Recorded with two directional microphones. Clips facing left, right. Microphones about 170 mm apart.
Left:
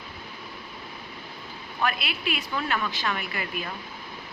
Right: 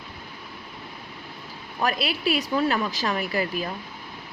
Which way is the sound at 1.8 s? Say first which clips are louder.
Right 4 dB; 40° right (ahead or behind).